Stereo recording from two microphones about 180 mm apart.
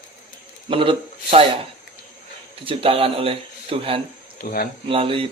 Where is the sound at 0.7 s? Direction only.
30° right (ahead or behind).